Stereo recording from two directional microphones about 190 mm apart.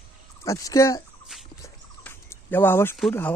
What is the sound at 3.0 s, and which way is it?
Speech, 5° left (ahead or behind).